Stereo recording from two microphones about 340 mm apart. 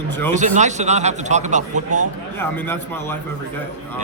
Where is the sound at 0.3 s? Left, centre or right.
Right.